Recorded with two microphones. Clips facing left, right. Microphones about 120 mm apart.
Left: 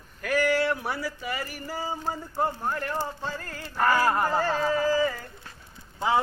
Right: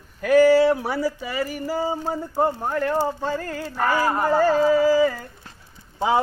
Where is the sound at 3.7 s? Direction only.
Centre (ahead or behind).